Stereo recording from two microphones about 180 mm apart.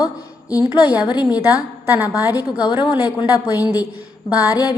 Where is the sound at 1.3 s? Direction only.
20° left (ahead or behind).